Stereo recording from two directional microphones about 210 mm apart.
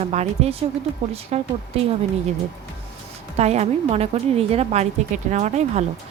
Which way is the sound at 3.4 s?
30° right (ahead or behind).